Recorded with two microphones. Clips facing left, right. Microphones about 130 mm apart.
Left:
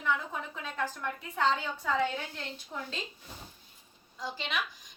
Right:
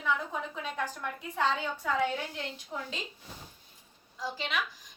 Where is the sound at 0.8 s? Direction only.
15° right (ahead or behind).